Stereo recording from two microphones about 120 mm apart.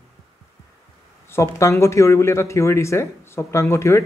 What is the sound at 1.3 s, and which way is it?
Speech, 25° left (ahead or behind).